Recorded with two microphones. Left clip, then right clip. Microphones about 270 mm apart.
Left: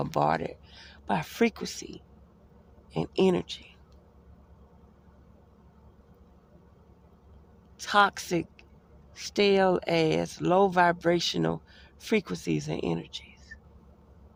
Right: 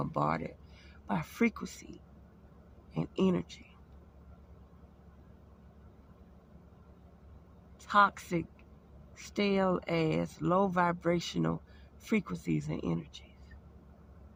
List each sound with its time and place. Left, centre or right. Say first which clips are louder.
0.0 s speech: left 6 dB; centre
7.9 s speech: left 3 dB; left